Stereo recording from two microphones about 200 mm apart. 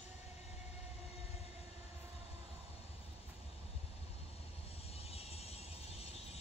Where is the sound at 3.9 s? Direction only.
30° left (ahead or behind).